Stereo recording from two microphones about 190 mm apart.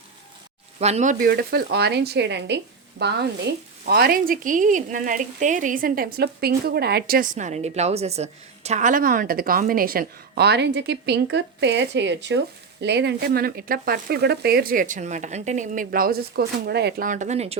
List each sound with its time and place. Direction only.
0.8 s speech: 35° right (ahead or behind)
1.2 s a woman's voice: 55° right (ahead or behind)
17.1 s speech: 40° right (ahead or behind)